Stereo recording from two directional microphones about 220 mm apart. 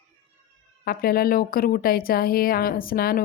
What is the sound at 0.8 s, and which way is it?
A woman's voice, 40° left (ahead or behind).